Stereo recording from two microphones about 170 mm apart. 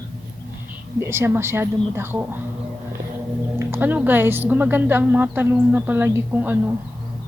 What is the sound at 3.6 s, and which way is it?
Speech, 15° right (ahead or behind).